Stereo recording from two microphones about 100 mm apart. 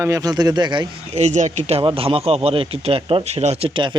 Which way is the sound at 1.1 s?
90° right.